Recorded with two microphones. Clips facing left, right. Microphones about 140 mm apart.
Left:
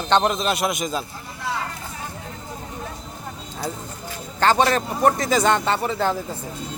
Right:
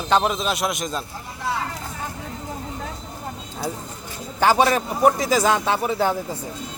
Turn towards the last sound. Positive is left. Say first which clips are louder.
# right 1 dB
turn(degrees=-10)  # may be behind; listen again after turning